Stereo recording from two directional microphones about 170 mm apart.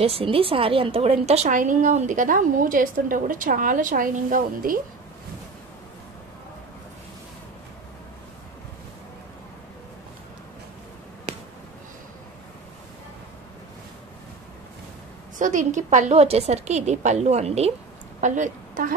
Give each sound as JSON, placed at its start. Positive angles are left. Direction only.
{"t": 0.0, "sound": "a woman's voice", "side_deg": -35}
{"t": 15.3, "sound": "a woman's voice", "side_deg": -50}